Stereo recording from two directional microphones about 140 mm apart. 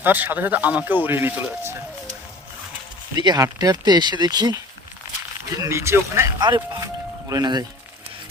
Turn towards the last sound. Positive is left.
turn(degrees=-30)  # may be behind; listen again after turning